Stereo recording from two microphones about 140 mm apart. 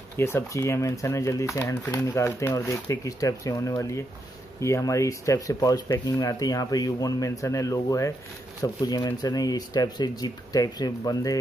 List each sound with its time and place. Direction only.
0.2 s speech: 20° left (ahead or behind)